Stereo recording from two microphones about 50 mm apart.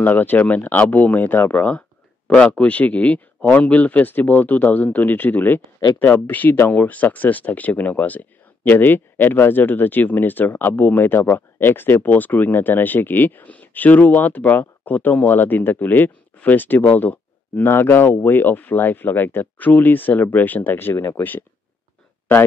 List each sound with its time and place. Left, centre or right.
0.0 s speech: left
1.6 s a sound: left
2.5 s speech: left
12.0 s speech: left
17.6 s speech: left